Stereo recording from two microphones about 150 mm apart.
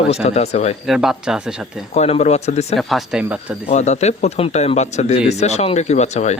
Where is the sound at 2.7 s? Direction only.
Centre (ahead or behind).